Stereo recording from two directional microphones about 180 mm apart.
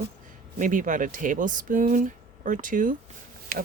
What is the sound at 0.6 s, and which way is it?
Speech, 45° right (ahead or behind).